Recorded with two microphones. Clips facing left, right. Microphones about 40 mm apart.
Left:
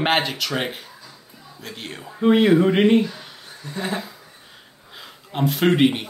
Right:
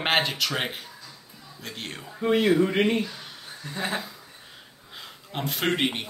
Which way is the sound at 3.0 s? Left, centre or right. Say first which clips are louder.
Left 6 dB; centre.